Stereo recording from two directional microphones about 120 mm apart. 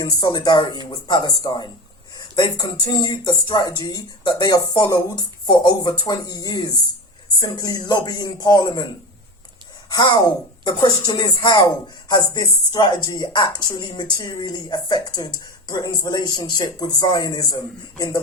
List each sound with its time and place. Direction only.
0.0 s speech: 40° left (ahead or behind)
2.1 s a sound: 40° left (ahead or behind)
2.8 s speech: 35° left (ahead or behind)
9.9 s speech: 35° left (ahead or behind)